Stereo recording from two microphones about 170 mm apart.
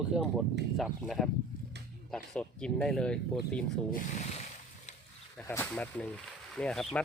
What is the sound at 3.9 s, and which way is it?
Speech, 45° left (ahead or behind).